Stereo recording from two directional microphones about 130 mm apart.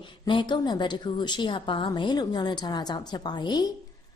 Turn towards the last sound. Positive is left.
turn(degrees=35)  # may be behind; listen again after turning